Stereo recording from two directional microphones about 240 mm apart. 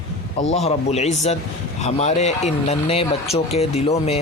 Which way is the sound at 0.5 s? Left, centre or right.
Left.